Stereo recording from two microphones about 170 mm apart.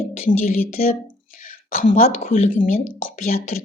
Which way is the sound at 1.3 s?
50° left (ahead or behind).